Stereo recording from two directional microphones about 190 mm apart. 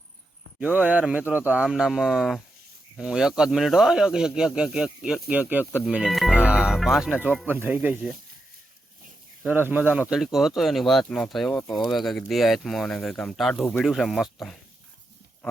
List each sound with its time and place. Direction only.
0.6 s speech: 5° right (ahead or behind)
9.5 s speech: 10° right (ahead or behind)